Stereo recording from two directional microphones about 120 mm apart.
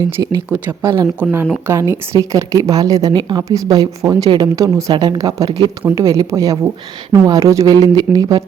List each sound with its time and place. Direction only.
0.2 s a woman's voice: 25° right (ahead or behind)